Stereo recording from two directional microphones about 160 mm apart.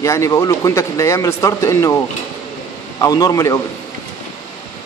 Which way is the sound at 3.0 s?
20° left (ahead or behind).